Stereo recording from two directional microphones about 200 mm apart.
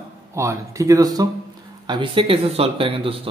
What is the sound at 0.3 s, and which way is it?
Speech, 15° right (ahead or behind).